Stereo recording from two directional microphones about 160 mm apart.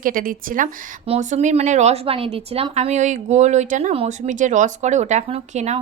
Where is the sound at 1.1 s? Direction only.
45° right (ahead or behind).